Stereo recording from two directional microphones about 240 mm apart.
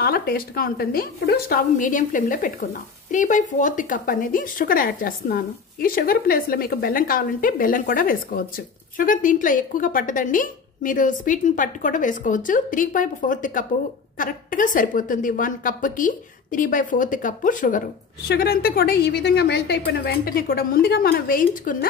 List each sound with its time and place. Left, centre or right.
0.0 s a woman's voice: left